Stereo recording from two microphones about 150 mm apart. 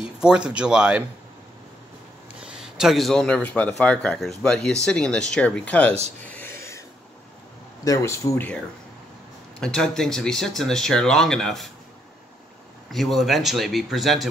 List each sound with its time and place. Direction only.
0.2 s a man's voice: 5° right (ahead or behind)
2.4 s a man's voice: 5° right (ahead or behind)
6.2 s whispering: 10° left (ahead or behind)
7.8 s speech: 20° left (ahead or behind)
9.6 s a man's voice: 5° left (ahead or behind)
12.9 s a man's voice: centre (ahead or behind)